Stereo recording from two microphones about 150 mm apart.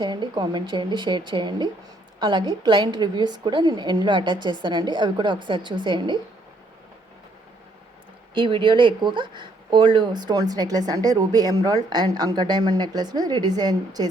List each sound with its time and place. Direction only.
0.0 s a woman's voice: 30° right (ahead or behind)
8.4 s speech: 35° right (ahead or behind)